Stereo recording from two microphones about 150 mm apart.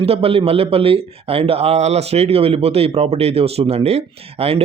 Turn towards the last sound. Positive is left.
turn(degrees=-40)  # may be behind; listen again after turning